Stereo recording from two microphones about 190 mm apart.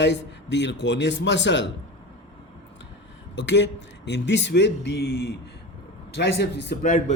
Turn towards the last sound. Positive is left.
turn(degrees=65)  # may be behind; listen again after turning